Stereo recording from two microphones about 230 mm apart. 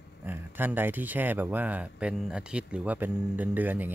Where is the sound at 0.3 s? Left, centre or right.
Centre.